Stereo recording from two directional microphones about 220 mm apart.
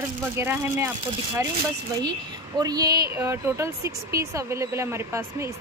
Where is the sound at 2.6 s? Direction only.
15° right (ahead or behind).